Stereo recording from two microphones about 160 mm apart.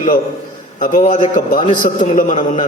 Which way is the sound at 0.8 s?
55° left (ahead or behind).